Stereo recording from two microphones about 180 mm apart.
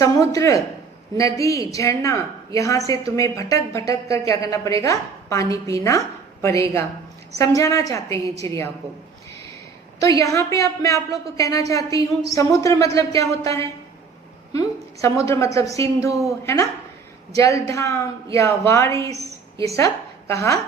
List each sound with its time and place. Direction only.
0.0 s a woman's voice: 20° left (ahead or behind)
10.0 s a woman's voice: 15° left (ahead or behind)